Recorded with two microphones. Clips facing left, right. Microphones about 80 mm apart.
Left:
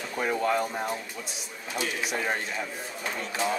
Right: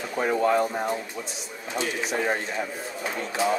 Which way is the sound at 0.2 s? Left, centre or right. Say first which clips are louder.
Right 4 dB; centre.